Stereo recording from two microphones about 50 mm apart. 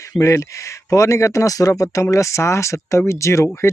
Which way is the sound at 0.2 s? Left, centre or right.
Left.